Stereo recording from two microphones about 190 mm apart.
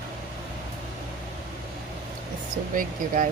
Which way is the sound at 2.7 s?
45° right (ahead or behind).